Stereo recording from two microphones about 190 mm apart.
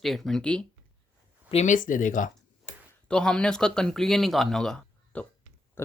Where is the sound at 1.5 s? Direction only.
35° left (ahead or behind).